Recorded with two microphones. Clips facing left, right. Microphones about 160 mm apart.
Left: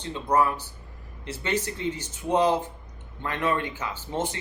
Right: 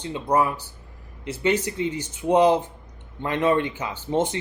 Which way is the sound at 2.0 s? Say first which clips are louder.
Right 5 dB; 15° right (ahead or behind).